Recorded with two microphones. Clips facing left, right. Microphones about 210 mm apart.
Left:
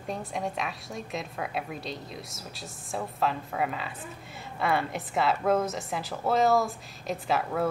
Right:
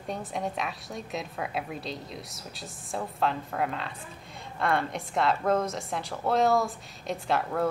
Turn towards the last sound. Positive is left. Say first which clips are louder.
# even
turn(degrees=0)  # may be behind; listen again after turning